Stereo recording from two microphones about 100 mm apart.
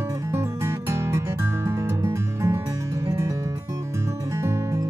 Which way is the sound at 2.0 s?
30° right (ahead or behind).